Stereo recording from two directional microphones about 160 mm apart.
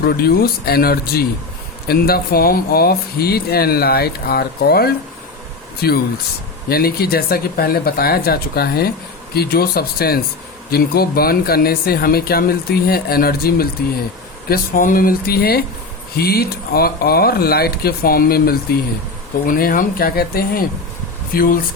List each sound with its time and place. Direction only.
0.0 s speech: 75° left (ahead or behind)
14.5 s speech: 60° left (ahead or behind)